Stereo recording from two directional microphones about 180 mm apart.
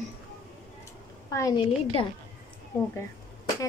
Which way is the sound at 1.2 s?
20° left (ahead or behind).